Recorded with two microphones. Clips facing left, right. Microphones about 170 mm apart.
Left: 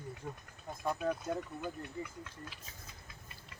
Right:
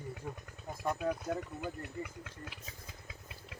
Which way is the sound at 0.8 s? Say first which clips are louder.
Even; 5° right (ahead or behind).